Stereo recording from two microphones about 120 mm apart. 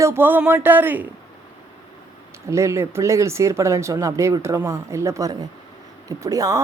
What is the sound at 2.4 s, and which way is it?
Speech, 25° right (ahead or behind).